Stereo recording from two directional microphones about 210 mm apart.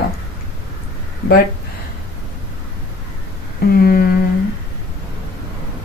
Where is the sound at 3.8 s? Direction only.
45° left (ahead or behind).